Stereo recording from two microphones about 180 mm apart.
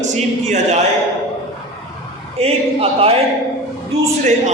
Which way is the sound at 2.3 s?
35° right (ahead or behind).